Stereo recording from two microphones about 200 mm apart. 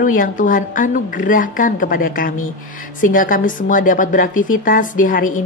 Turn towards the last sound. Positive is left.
turn(degrees=45)  # may be behind; listen again after turning